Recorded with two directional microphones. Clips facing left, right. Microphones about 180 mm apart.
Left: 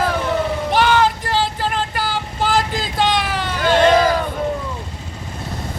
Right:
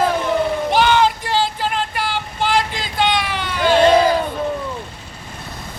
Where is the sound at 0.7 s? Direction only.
Centre (ahead or behind).